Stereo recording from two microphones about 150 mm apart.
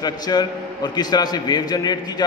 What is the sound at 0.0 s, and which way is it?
A man's voice, 25° left (ahead or behind).